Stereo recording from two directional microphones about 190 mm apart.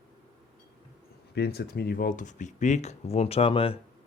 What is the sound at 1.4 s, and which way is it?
Speech, 55° left (ahead or behind).